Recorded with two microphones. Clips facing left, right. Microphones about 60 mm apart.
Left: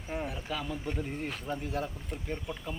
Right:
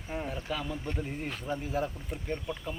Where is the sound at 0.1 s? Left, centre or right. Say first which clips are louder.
Right 1 dB; centre.